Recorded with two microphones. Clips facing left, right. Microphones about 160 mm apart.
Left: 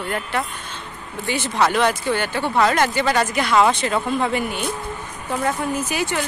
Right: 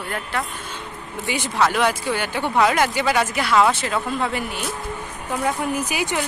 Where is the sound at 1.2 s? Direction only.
10° right (ahead or behind).